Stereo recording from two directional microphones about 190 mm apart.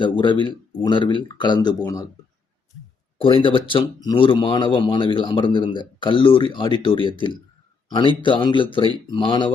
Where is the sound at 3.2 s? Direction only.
25° left (ahead or behind).